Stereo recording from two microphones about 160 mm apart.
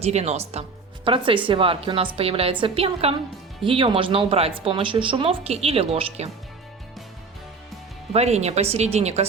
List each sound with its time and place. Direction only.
0.0 s speech: 45° right (ahead or behind)
1.0 s speech: 30° right (ahead or behind)
8.1 s speech: 40° right (ahead or behind)